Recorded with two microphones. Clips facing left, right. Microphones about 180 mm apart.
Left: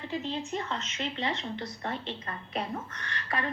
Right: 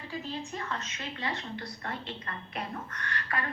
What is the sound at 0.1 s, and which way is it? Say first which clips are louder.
A woman's voice: left 4 dB; 20° left (ahead or behind).